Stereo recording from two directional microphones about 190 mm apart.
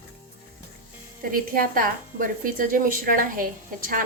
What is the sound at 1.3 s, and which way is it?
A woman's voice, 50° right (ahead or behind).